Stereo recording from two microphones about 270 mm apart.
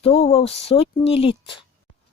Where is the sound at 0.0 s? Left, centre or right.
Left.